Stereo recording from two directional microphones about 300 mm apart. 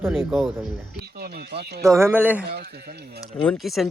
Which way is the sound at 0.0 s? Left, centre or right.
Centre.